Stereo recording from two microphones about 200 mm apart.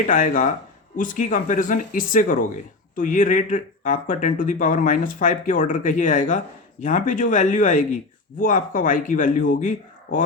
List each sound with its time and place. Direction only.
0.1 s speech: 40° left (ahead or behind)